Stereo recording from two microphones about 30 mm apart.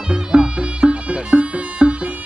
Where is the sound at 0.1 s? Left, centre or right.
Right.